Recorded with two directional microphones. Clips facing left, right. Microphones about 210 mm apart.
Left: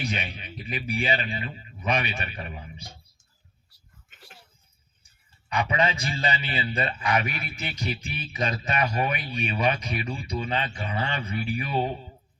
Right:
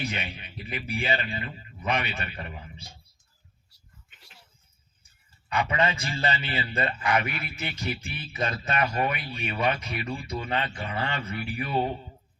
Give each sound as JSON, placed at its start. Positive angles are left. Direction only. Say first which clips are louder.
{"t": 0.0, "sound": "a man's voice", "louder": "left 1 dB", "side_deg": 15}
{"t": 4.1, "sound": "a sound", "louder": "left 9 dB", "side_deg": 50}
{"t": 5.5, "sound": "a man's voice", "louder": "left 1 dB", "side_deg": 15}